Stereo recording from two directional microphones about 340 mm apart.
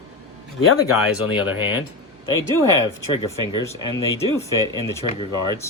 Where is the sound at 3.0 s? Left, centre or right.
Left.